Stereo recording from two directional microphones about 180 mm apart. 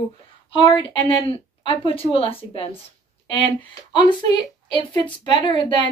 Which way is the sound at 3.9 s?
25° left (ahead or behind).